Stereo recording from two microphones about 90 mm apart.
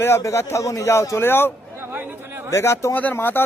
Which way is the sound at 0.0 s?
30° left (ahead or behind).